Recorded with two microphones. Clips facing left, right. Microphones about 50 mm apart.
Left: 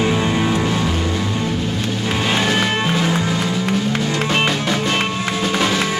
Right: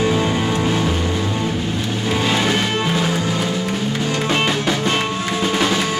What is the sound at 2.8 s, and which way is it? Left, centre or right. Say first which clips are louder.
Music: left 1 dB; centre.